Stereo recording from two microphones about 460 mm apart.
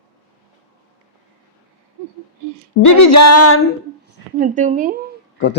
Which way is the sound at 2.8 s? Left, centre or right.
Left.